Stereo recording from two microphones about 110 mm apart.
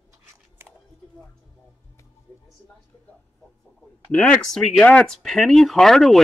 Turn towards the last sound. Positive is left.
turn(degrees=5)  # may be behind; listen again after turning